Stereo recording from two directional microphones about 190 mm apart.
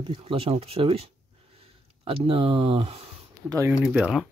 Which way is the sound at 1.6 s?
30° right (ahead or behind).